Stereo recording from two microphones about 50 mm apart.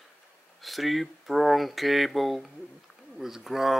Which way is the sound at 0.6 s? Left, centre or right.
Centre.